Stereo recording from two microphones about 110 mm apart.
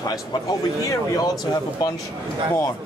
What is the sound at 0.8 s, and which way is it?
A man's voice, 35° left (ahead or behind).